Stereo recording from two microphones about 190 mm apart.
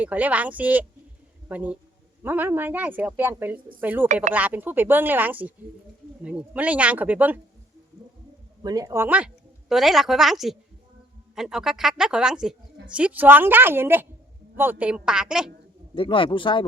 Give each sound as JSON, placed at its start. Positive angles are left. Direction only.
{"t": 0.0, "sound": "a woman's voice", "side_deg": -10}
{"t": 4.1, "sound": "speech", "side_deg": -40}
{"t": 4.4, "sound": "a woman's voice", "side_deg": -10}
{"t": 8.6, "sound": "a woman's voice", "side_deg": -20}
{"t": 16.0, "sound": "speech", "side_deg": 25}